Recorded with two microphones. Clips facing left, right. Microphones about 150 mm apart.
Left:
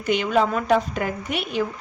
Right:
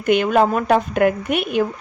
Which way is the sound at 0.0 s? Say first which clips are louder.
Right 5 dB; 55° right (ahead or behind).